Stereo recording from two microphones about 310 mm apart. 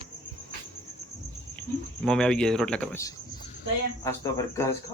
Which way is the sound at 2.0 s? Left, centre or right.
Centre.